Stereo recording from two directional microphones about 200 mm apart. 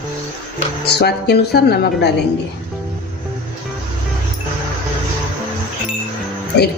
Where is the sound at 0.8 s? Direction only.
55° left (ahead or behind).